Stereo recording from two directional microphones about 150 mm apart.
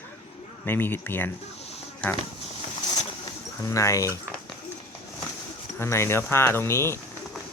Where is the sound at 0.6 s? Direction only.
15° left (ahead or behind).